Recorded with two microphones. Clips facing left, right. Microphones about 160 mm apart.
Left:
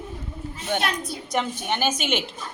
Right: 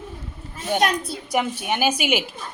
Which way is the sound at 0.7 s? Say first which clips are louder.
Right 6 dB; 40° right (ahead or behind).